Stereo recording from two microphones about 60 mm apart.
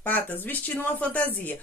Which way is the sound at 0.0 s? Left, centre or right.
Left.